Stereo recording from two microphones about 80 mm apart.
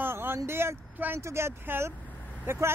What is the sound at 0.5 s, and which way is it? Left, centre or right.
Speech, right.